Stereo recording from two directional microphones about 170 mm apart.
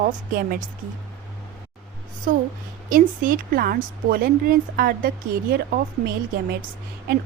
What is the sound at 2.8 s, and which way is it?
Speech, 55° right (ahead or behind).